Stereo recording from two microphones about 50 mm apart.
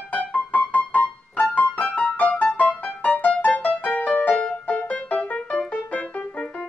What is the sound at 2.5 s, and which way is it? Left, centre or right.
Music, left.